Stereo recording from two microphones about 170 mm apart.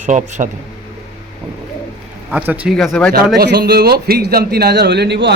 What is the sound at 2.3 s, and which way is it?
Speech, 10° right (ahead or behind).